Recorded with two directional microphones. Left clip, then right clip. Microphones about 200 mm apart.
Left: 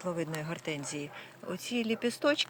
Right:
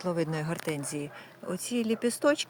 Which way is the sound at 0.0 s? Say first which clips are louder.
Right 4 dB; 50° right (ahead or behind).